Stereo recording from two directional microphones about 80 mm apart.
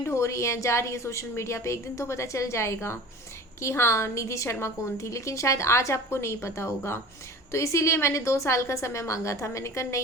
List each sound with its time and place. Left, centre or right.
0.0 s a woman's voice: left